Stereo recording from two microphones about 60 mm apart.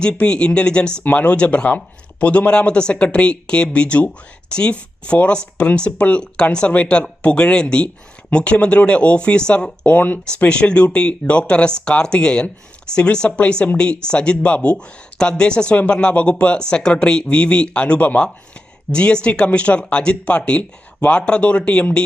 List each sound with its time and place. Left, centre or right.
0.0 s speech: centre
9.8 s speech: left